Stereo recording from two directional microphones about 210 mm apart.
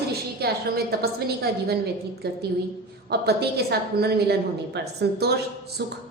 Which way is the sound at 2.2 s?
50° right (ahead or behind).